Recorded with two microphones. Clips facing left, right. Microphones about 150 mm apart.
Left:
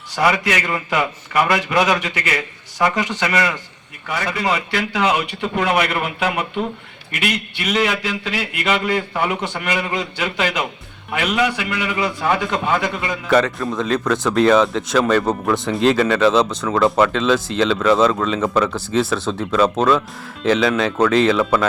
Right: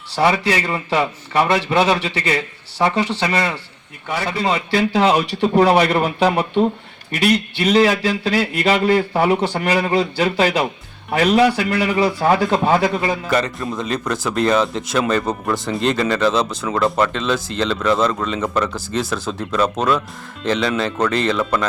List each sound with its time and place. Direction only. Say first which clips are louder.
0.1 s a man's voice: right 1 dB; 30° right (ahead or behind)
13.3 s speech: left 3 dB; centre (ahead or behind)